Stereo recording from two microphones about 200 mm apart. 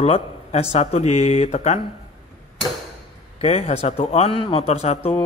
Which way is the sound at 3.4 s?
30° left (ahead or behind).